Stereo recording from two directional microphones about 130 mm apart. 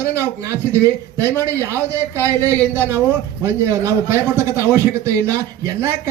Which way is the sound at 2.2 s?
20° right (ahead or behind).